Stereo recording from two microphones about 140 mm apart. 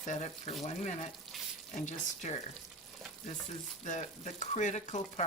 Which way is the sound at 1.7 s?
60° left (ahead or behind).